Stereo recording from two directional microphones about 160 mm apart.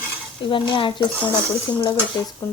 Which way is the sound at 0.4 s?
30° left (ahead or behind).